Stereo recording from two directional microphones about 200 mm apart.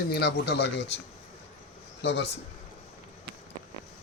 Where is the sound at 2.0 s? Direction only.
60° left (ahead or behind).